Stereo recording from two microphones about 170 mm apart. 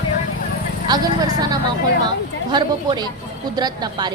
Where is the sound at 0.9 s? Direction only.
25° right (ahead or behind).